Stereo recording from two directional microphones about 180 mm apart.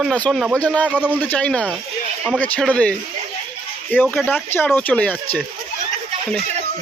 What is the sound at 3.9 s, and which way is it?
Speech, 10° left (ahead or behind).